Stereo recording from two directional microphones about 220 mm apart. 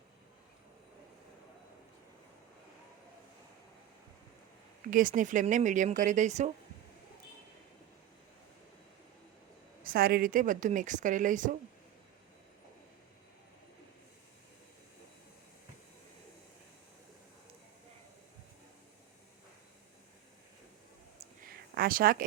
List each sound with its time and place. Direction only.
4.9 s a woman's voice: 40° right (ahead or behind)
9.8 s a woman's voice: 40° right (ahead or behind)
21.4 s a sound: 40° right (ahead or behind)